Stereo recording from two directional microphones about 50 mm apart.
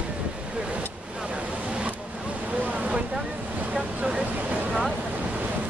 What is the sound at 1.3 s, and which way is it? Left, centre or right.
Waves, right.